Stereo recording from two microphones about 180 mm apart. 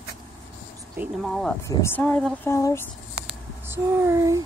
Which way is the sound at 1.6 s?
15° left (ahead or behind).